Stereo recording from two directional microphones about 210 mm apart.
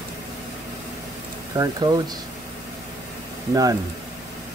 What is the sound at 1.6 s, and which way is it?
Speech, 20° right (ahead or behind).